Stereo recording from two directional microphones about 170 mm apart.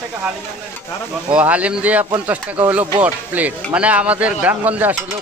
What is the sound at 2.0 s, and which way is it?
A man's voice, 20° right (ahead or behind).